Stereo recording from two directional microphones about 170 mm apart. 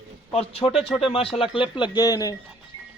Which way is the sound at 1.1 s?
35° left (ahead or behind).